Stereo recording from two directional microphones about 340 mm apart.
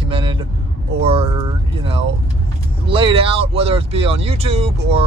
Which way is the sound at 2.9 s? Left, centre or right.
Centre.